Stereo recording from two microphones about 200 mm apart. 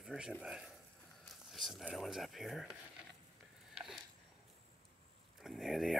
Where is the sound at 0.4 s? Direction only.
5° right (ahead or behind).